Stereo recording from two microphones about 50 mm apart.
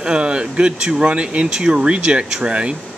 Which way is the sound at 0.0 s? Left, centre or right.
Centre.